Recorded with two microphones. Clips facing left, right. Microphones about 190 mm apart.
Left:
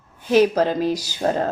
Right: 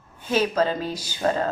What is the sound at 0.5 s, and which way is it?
Speech, 40° left (ahead or behind).